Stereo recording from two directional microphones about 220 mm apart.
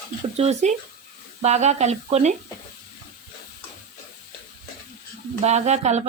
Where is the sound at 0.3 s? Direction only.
30° right (ahead or behind).